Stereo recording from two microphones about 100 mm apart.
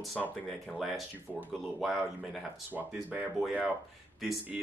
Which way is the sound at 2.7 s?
15° right (ahead or behind).